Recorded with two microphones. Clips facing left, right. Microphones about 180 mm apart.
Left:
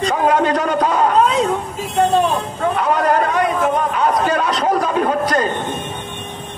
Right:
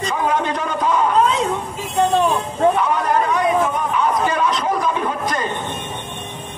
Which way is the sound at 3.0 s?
65° left (ahead or behind).